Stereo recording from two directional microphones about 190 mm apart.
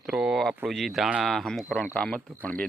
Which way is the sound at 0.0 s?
5° right (ahead or behind).